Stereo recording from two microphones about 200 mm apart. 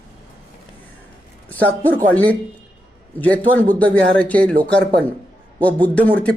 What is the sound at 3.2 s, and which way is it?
Speech, 10° left (ahead or behind).